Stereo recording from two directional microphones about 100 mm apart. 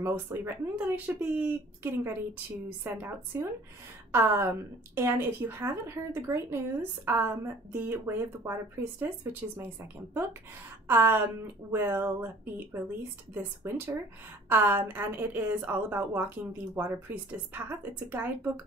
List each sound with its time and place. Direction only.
0.0 s a woman's voice: 20° right (ahead or behind)